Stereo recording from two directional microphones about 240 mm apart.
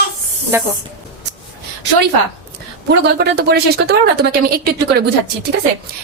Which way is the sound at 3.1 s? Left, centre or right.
Right.